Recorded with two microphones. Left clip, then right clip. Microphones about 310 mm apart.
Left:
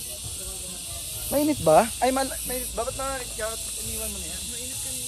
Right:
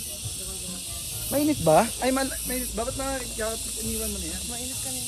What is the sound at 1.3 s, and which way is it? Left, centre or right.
Speech, left.